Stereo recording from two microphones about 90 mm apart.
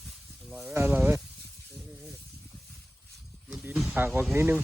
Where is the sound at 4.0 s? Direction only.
20° right (ahead or behind).